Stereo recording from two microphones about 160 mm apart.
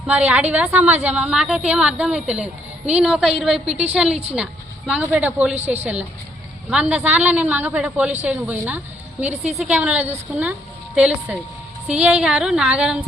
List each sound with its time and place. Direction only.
0.1 s a woman's voice: 10° right (ahead or behind)
5.5 s a woman's voice: 45° right (ahead or behind)
6.7 s a woman's voice: 5° right (ahead or behind)